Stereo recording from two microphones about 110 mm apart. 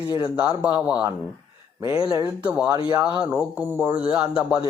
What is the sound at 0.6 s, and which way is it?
Speech, 15° right (ahead or behind).